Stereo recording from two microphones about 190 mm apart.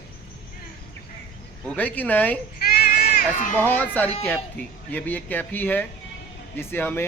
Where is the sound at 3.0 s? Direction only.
40° left (ahead or behind).